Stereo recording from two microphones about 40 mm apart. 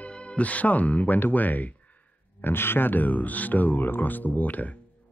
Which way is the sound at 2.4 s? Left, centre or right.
Left.